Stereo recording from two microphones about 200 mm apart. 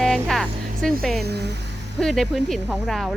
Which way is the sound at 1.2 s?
55° right (ahead or behind).